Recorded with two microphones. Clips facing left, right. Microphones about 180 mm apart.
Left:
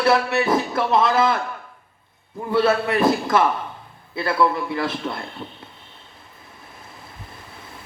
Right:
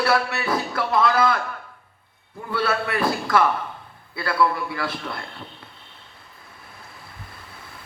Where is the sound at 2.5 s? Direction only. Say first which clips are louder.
Left 6 dB; 20° left (ahead or behind).